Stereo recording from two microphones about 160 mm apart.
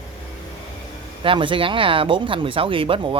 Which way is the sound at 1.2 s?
30° right (ahead or behind).